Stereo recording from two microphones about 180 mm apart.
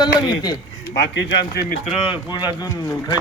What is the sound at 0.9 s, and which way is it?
Speech, 70° left (ahead or behind).